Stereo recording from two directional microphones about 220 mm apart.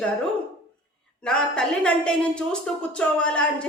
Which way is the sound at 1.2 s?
5° left (ahead or behind).